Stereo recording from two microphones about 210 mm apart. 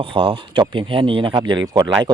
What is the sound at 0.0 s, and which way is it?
Speech, 25° right (ahead or behind).